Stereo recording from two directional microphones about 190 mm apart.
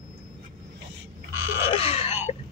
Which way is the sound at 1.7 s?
30° left (ahead or behind).